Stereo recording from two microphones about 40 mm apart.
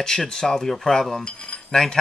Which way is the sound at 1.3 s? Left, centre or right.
Left.